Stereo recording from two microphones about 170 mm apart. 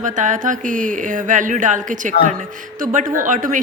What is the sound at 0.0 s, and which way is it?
Speech, 50° right (ahead or behind).